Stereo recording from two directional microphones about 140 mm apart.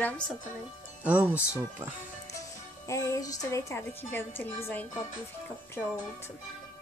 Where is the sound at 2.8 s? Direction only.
25° left (ahead or behind).